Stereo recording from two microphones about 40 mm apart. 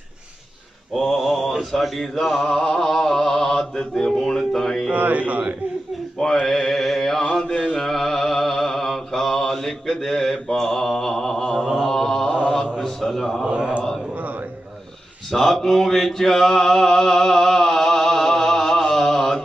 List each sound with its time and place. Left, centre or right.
0.9 s a man's voice: centre
2.4 s chant: centre
4.9 s a man's voice: right
6.4 s mantra: centre
7.2 s mantra: centre
11.8 s chant: centre
12.7 s a sound: centre
13.5 s speech: right
15.3 s mantra: centre